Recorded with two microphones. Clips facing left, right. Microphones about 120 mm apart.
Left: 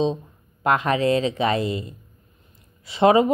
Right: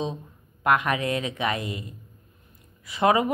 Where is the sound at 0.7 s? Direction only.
30° left (ahead or behind).